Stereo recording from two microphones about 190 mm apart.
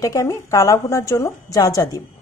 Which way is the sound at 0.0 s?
15° left (ahead or behind).